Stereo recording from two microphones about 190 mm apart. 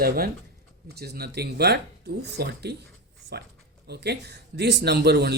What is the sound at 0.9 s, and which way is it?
Speech, 55° right (ahead or behind).